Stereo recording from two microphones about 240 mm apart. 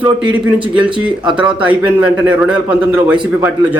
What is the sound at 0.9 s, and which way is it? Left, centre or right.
Speech, centre.